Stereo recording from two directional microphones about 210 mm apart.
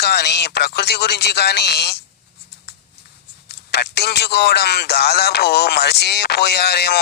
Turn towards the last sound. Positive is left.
turn(degrees=50)  # may be behind; listen again after turning